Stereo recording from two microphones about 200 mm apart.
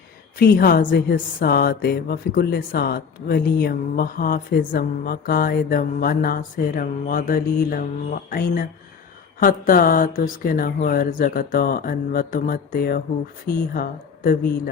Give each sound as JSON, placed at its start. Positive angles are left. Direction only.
{"t": 0.3, "sound": "speech", "side_deg": 50}